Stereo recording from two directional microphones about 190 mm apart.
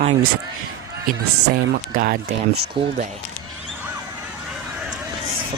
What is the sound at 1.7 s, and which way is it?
Speech, 50° right (ahead or behind).